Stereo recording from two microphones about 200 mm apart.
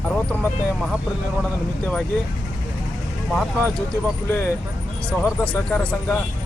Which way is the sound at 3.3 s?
5° left (ahead or behind).